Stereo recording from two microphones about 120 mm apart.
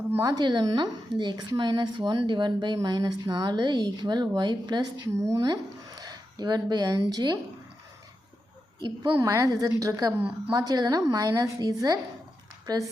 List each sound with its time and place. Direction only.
0.1 s speech: 30° right (ahead or behind)
9.1 s a woman's voice: 25° right (ahead or behind)
10.2 s speech: 10° right (ahead or behind)
10.5 s speech: 30° right (ahead or behind)